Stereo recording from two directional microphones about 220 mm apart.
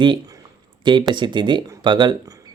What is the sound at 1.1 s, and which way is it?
Speech, 20° right (ahead or behind).